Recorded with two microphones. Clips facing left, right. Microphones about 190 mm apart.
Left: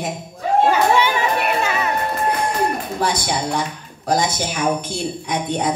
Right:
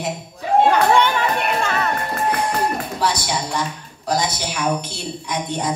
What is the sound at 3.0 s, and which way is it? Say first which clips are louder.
A woman's voice: left 2 dB; 55° left (ahead or behind).